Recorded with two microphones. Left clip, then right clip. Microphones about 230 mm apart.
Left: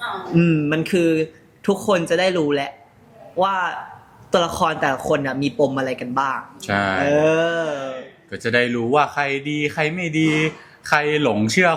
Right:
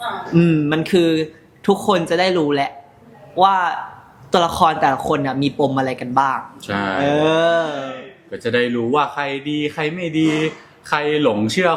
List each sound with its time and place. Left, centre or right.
0.3 s speech: centre
6.6 s speech: left
7.0 s speech: centre
8.3 s speech: left